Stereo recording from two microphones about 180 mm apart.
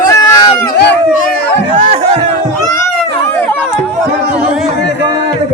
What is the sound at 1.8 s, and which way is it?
Speech, 35° right (ahead or behind).